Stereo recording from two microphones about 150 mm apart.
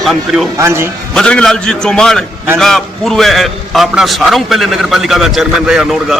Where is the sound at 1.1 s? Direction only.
5° left (ahead or behind).